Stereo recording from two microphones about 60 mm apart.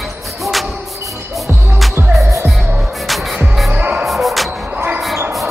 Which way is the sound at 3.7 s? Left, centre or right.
Right.